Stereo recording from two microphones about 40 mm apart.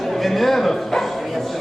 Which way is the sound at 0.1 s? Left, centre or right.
Centre.